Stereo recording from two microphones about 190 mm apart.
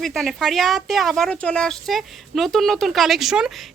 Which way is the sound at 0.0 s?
Centre (ahead or behind).